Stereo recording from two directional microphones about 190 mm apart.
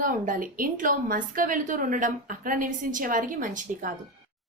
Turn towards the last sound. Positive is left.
turn(degrees=-45)  # may be behind; listen again after turning